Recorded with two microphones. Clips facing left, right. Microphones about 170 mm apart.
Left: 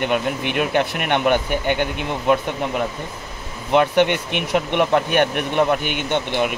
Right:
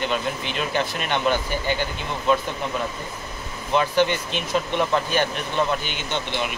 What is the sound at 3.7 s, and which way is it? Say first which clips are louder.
Speech: left 4 dB; 65° left (ahead or behind).